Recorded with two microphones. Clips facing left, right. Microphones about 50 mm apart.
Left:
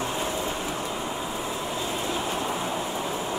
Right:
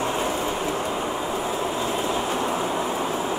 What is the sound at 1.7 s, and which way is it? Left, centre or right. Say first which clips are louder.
Train: right 4 dB; right.